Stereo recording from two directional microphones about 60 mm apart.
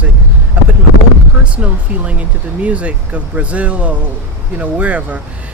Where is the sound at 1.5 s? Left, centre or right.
Right.